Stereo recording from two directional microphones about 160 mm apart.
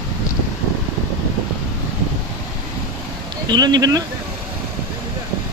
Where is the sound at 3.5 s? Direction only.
25° right (ahead or behind).